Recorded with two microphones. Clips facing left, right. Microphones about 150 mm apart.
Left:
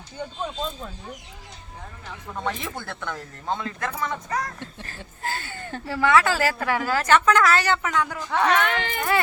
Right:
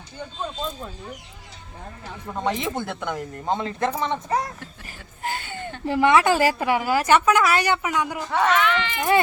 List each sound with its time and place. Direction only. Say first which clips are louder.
2.3 s speech: right 5 dB; 15° right (ahead or behind)
4.8 s a woman's voice: right 2 dB; 15° right (ahead or behind)
8.3 s speech: right 1 dB; centre (ahead or behind)
8.5 s speech: right 2 dB; 50° left (ahead or behind)